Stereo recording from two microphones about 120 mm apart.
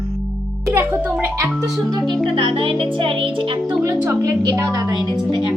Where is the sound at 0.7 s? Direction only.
20° right (ahead or behind).